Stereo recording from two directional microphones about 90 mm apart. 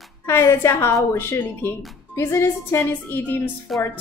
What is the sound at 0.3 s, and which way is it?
A woman's voice, 30° left (ahead or behind).